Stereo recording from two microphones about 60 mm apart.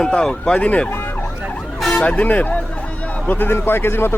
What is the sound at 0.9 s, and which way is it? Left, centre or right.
Ambulance, left.